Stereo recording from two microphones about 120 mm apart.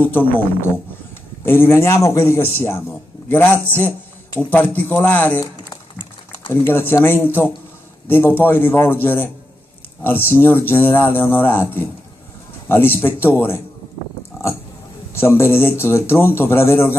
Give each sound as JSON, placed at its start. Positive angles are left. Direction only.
{"t": 0.0, "sound": "a man's voice", "side_deg": 15}
{"t": 6.5, "sound": "speech", "side_deg": 20}
{"t": 15.1, "sound": "a man's voice", "side_deg": 20}